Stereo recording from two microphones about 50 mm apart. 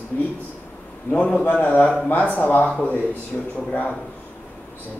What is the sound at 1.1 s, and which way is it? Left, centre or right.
A man's voice, left.